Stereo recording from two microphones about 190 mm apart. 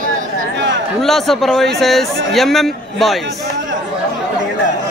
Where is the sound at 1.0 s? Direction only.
Centre (ahead or behind).